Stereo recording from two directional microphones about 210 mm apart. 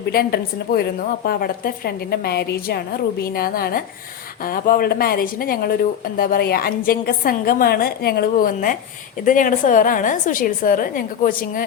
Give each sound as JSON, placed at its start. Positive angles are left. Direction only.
{"t": 0.1, "sound": "a woman's voice", "side_deg": 45}